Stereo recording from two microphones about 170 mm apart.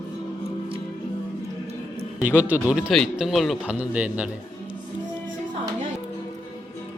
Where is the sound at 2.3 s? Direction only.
10° right (ahead or behind).